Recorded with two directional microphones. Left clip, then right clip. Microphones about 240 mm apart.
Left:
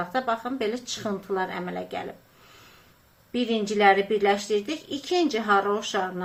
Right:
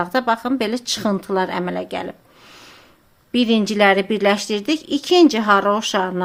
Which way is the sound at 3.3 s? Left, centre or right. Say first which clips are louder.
Right 8 dB; right.